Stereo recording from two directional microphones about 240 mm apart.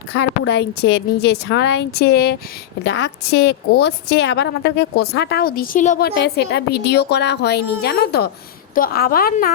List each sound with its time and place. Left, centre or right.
0.1 s a woman's voice: left
6.1 s a woman's voice: left